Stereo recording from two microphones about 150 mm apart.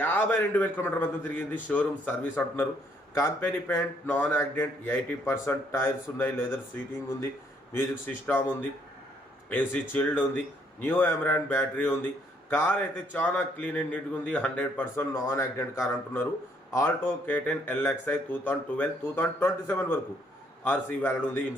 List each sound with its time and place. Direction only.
0.0 s a man's voice: 10° left (ahead or behind)
7.7 s a man's voice: 15° left (ahead or behind)
9.5 s a man's voice: 10° left (ahead or behind)